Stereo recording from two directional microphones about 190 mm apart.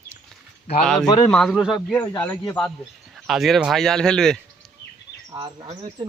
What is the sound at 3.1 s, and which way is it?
Speech, centre (ahead or behind).